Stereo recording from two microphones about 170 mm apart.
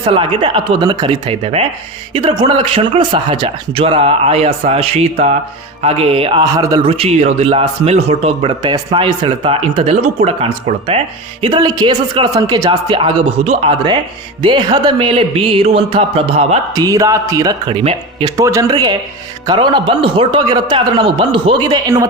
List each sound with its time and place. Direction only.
0.0 s speech: 30° right (ahead or behind)
6.4 s a man's voice: 20° right (ahead or behind)
6.8 s speech: 35° right (ahead or behind)
16.7 s a man's voice: 20° right (ahead or behind)